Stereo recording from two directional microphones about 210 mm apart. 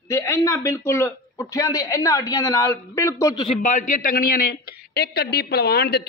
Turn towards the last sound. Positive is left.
turn(degrees=50)  # may be behind; listen again after turning